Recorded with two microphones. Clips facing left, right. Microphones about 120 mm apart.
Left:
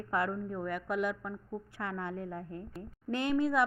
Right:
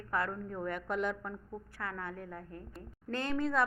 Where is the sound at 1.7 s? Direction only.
20° left (ahead or behind).